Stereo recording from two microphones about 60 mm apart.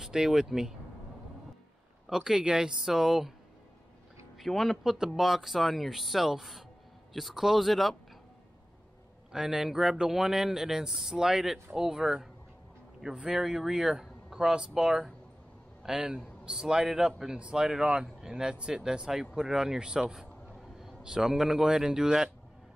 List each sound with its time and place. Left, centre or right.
0.0 s speech: centre
2.0 s speech: centre
4.4 s speech: centre
9.3 s a man's voice: centre